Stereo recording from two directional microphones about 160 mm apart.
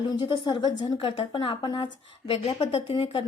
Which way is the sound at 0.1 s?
30° left (ahead or behind).